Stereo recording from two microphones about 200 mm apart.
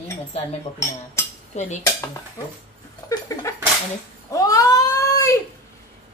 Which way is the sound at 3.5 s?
15° left (ahead or behind).